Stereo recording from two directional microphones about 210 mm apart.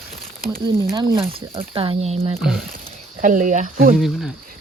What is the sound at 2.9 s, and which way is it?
Speech, 40° right (ahead or behind).